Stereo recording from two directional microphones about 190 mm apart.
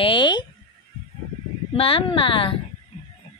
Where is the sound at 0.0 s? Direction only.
25° left (ahead or behind).